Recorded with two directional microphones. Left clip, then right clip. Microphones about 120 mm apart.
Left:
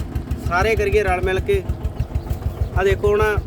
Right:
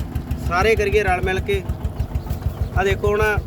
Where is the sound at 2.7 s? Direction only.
65° left (ahead or behind).